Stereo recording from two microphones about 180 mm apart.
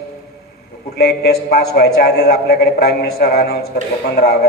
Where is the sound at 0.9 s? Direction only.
60° left (ahead or behind).